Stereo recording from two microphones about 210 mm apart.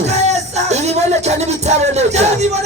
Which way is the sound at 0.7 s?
30° right (ahead or behind).